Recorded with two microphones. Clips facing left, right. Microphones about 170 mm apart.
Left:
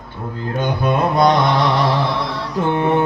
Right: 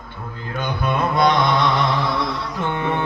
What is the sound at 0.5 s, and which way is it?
Mantra, 40° left (ahead or behind).